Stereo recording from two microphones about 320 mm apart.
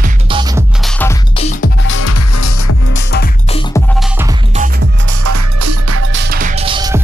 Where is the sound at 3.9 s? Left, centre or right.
Centre.